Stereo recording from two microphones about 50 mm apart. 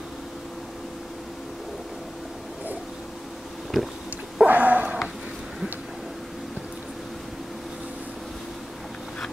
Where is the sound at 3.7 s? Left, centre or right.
Centre.